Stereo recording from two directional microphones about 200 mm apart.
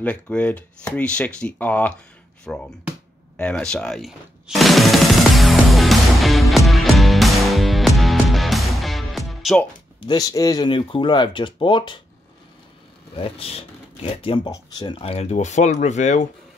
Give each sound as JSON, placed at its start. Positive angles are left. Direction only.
{"t": 0.0, "sound": "speech", "side_deg": 5}
{"t": 3.3, "sound": "music", "side_deg": 5}
{"t": 9.9, "sound": "speech", "side_deg": 20}
{"t": 13.1, "sound": "speech", "side_deg": 30}